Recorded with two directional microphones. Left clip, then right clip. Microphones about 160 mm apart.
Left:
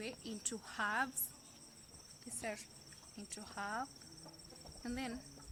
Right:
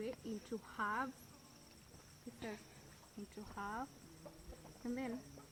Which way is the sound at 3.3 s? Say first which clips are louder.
Left 3 dB; 30° left (ahead or behind).